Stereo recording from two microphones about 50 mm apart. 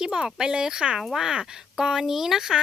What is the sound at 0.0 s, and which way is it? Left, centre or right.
Speech, centre.